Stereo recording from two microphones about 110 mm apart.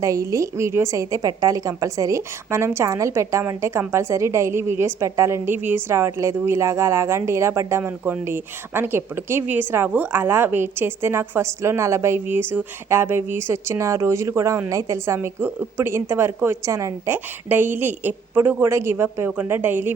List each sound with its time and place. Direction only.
0.0 s a woman's voice: 30° right (ahead or behind)